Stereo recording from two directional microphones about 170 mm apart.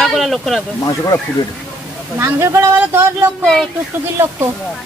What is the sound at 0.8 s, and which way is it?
Speech, 20° left (ahead or behind).